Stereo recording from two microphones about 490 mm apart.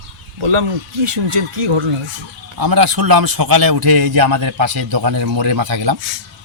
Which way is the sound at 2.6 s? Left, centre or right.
Right.